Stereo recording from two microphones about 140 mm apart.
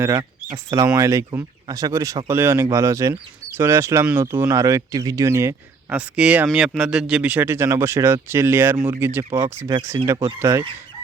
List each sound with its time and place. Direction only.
0.0 s speech: 20° right (ahead or behind)